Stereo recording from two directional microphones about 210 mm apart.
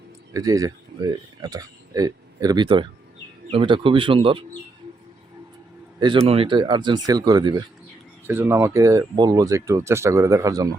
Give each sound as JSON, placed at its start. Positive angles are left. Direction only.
{"t": 0.3, "sound": "speech", "side_deg": -15}
{"t": 6.2, "sound": "speech", "side_deg": -25}